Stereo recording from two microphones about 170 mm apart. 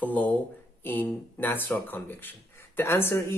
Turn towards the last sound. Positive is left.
turn(degrees=15)  # may be behind; listen again after turning